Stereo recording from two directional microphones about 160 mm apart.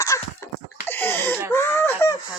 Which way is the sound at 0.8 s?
15° left (ahead or behind).